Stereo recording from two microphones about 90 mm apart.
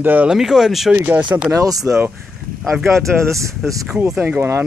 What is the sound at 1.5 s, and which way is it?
Speech, 40° right (ahead or behind).